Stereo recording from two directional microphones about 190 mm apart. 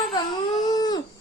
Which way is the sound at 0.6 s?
20° left (ahead or behind).